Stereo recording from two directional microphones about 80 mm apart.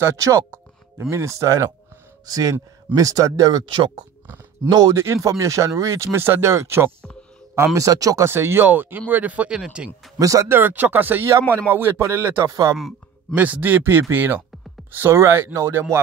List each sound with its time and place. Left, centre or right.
0.0 s speech: right
3.5 s speech: right
4.6 s speech: right
4.9 s speech: right
6.1 s speech: right
8.3 s speech: right; by 9.8 s centre
10.1 s speech: right
10.5 s speech: right
12.4 s speech: right
13.3 s speech: right